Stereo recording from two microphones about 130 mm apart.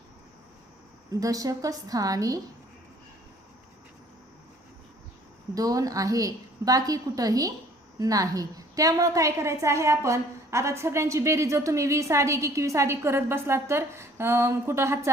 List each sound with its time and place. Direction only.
1.1 s a woman's voice: 25° right (ahead or behind)
5.5 s a woman's voice: 25° right (ahead or behind)